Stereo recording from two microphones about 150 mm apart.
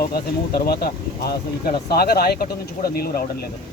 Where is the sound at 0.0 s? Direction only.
90° left.